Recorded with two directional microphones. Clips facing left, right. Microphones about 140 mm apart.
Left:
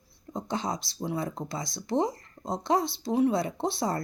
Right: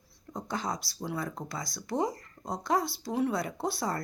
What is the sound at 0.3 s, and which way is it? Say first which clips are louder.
Speech: left 3 dB; 25° left (ahead or behind).